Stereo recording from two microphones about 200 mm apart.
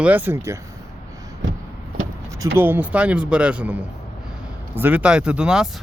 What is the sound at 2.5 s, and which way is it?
Speech, 10° right (ahead or behind).